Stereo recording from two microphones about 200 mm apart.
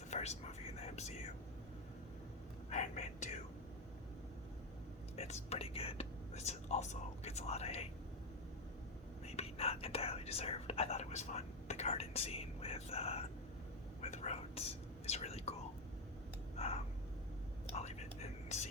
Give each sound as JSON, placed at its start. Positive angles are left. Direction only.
{"t": 0.1, "sound": "whispering", "side_deg": 35}
{"t": 2.6, "sound": "speech", "side_deg": 35}
{"t": 5.1, "sound": "speech", "side_deg": 30}
{"t": 9.2, "sound": "speech", "side_deg": 30}
{"t": 16.6, "sound": "a sound", "side_deg": 30}
{"t": 17.7, "sound": "whispering", "side_deg": 35}